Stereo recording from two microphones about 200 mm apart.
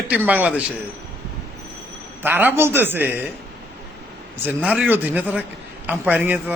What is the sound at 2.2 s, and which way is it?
A man's voice, 10° right (ahead or behind).